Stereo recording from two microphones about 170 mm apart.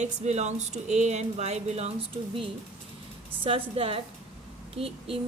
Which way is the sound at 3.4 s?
35° right (ahead or behind).